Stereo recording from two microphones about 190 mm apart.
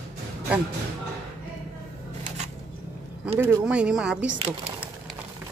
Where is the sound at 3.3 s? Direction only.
10° right (ahead or behind).